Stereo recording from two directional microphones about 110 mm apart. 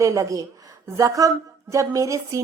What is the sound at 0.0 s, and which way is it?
A woman's voice, 30° right (ahead or behind).